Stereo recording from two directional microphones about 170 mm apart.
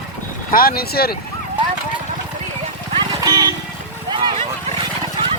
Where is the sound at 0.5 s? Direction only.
60° left (ahead or behind).